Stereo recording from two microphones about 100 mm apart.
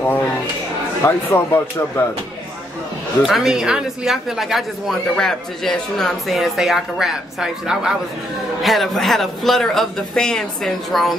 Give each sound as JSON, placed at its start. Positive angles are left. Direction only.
{"t": 1.0, "sound": "speech", "side_deg": 25}
{"t": 3.3, "sound": "speech", "side_deg": -5}